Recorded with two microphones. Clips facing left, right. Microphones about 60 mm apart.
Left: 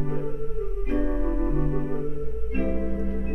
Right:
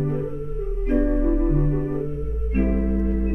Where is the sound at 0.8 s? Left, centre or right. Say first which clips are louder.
Right 6 dB; centre.